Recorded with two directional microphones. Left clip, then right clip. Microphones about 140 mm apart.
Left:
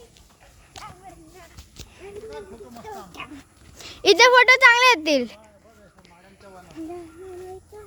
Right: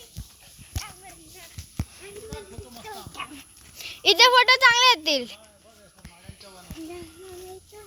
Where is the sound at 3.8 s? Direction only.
45° left (ahead or behind).